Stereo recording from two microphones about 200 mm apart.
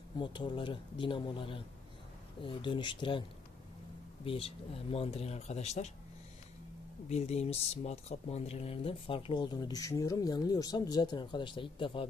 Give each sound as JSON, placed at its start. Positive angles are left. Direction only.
{"t": 0.2, "sound": "speech", "side_deg": 25}
{"t": 7.1, "sound": "speech", "side_deg": 30}